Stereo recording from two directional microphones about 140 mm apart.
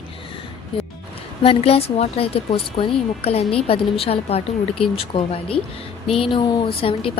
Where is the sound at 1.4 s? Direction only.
40° left (ahead or behind).